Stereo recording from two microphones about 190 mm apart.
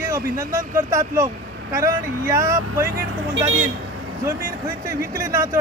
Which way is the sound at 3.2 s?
90° right.